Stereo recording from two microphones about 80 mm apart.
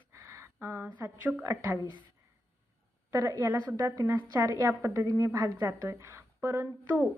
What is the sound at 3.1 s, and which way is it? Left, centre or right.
A woman's voice, right.